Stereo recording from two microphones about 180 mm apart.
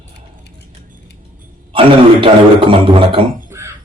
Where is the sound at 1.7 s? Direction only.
30° right (ahead or behind).